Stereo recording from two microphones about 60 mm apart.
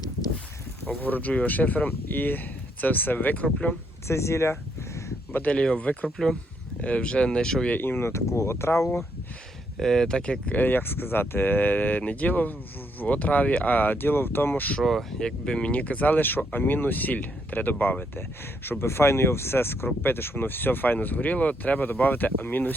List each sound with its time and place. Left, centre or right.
0.9 s speech: left
4.1 s speech: left
5.3 s speech: left
6.1 s speech: centre
6.8 s speech: left
7.8 s speech: left
9.7 s speech: centre; by 14.8 s left
14.8 s speech: centre
15.2 s speech: centre; by 18.0 s left
18.6 s speech: left